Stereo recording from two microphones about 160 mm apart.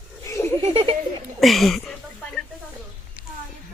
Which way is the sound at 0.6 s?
35° right (ahead or behind).